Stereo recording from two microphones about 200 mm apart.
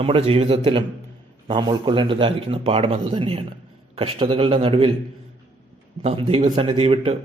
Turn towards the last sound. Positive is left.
turn(degrees=-30)  # may be behind; listen again after turning